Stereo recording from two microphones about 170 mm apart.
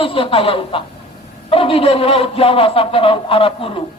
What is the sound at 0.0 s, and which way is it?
A woman's voice, 35° left (ahead or behind).